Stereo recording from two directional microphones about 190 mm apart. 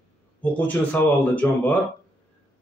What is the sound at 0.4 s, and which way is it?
Speech, 10° left (ahead or behind).